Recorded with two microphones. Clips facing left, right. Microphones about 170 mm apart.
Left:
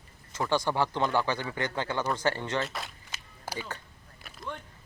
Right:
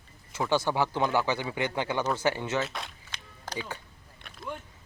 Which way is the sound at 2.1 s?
10° right (ahead or behind).